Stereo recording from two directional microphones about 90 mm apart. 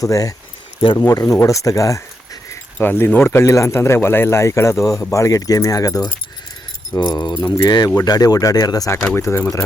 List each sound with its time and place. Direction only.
0.0 s speech: 40° left (ahead or behind)
2.7 s speech: 20° left (ahead or behind); by 8.9 s 40° left (ahead or behind)
9.1 s speech: 30° left (ahead or behind)